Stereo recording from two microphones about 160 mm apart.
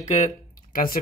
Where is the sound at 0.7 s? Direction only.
60° left (ahead or behind).